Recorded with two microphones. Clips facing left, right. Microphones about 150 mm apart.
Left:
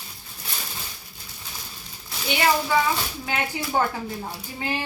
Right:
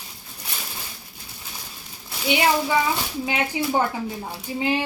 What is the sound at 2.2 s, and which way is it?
Speech, 15° right (ahead or behind).